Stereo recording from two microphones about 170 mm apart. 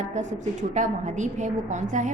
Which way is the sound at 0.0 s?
45° right (ahead or behind).